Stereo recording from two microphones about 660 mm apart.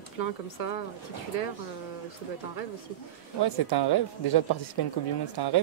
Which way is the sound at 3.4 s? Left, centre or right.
Left.